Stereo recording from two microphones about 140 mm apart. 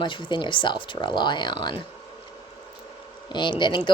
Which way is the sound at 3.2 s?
35° left (ahead or behind).